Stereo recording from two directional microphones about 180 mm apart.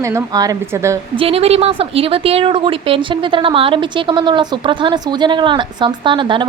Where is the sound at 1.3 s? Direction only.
35° right (ahead or behind).